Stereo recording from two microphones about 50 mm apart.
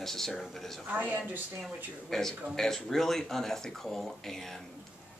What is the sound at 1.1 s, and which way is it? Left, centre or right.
Speech, right.